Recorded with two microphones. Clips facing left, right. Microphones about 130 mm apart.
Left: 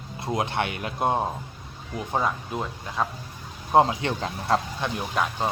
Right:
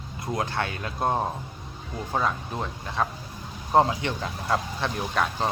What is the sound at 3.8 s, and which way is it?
Speech, 30° left (ahead or behind).